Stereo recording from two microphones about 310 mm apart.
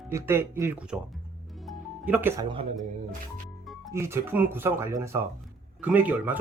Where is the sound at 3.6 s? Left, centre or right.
Centre.